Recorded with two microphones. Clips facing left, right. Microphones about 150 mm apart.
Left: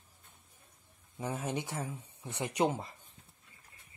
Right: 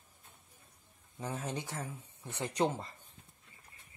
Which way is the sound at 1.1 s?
15° left (ahead or behind).